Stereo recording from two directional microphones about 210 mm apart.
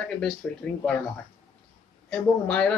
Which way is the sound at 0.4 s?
5° left (ahead or behind).